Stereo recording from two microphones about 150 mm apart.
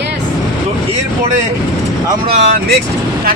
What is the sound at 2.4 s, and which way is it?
Speech, 90° right.